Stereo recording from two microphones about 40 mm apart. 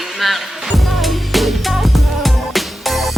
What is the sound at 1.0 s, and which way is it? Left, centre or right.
Music, centre.